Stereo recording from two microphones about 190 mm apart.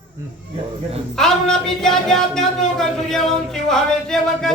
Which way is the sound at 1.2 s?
5° left (ahead or behind).